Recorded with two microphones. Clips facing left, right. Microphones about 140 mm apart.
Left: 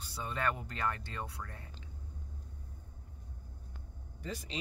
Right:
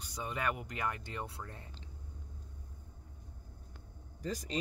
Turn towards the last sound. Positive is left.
turn(degrees=-40)  # may be behind; listen again after turning